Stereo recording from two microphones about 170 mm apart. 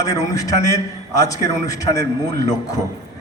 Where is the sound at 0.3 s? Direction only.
20° left (ahead or behind).